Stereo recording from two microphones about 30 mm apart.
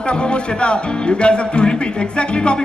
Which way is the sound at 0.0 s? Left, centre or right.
Left.